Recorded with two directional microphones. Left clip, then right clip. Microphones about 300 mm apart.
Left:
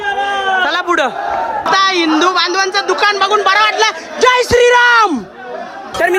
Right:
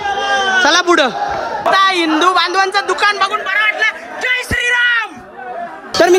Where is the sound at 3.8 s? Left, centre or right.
Centre.